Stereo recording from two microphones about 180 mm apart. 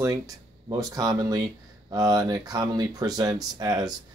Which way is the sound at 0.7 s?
20° right (ahead or behind).